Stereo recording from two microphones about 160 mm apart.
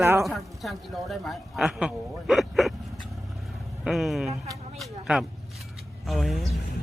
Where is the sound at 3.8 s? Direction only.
Centre (ahead or behind).